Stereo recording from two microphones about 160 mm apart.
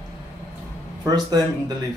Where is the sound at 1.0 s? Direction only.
25° right (ahead or behind).